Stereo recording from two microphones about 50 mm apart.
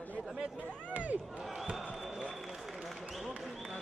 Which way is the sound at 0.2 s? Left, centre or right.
Right.